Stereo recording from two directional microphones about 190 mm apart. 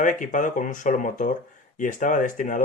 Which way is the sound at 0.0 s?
40° left (ahead or behind).